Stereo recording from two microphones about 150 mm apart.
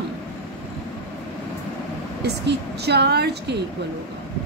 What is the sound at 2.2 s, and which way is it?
A woman's voice, 90° right.